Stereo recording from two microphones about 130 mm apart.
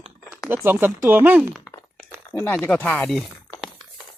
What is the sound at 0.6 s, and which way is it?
Speech, 15° right (ahead or behind).